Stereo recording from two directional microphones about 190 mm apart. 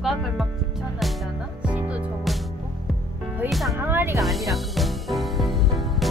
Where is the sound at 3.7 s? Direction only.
10° right (ahead or behind).